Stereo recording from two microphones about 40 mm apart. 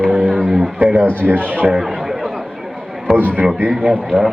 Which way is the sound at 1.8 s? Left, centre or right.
Centre.